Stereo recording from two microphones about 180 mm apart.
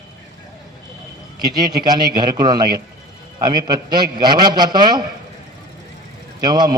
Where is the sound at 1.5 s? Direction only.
20° right (ahead or behind).